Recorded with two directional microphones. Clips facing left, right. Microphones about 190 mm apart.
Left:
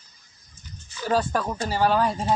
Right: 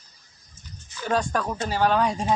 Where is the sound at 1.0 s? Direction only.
5° left (ahead or behind).